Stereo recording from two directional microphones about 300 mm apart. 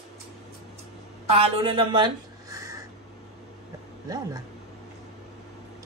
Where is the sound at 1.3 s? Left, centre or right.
Centre.